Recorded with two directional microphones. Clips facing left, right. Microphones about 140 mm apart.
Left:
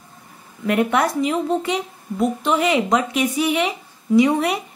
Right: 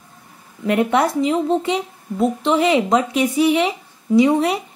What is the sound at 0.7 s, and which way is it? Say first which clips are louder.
Speech: right 2 dB; 30° right (ahead or behind).